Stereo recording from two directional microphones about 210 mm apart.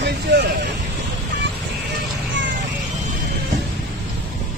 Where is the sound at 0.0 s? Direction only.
55° right (ahead or behind).